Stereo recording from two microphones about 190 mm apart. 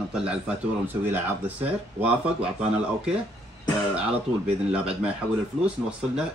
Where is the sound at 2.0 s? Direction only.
5° right (ahead or behind).